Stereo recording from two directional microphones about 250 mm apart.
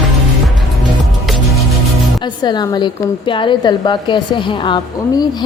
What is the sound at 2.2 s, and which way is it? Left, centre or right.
A woman's voice, centre.